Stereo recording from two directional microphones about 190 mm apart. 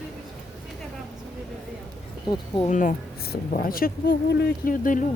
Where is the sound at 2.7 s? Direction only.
45° left (ahead or behind).